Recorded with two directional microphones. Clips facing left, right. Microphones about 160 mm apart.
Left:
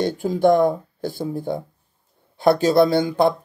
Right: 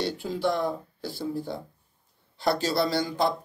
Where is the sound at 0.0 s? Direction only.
50° left (ahead or behind).